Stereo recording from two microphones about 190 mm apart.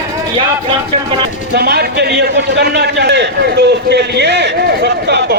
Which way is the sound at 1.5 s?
60° right (ahead or behind).